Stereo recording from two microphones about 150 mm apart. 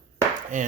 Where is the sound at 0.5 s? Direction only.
60° right (ahead or behind).